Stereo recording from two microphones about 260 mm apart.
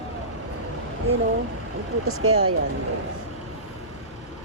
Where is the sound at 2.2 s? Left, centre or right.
Right.